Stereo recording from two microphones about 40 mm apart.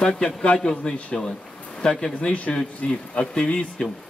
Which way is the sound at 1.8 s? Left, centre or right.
Left.